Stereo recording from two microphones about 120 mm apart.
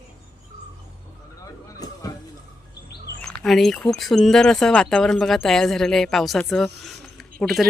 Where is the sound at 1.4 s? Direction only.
30° left (ahead or behind).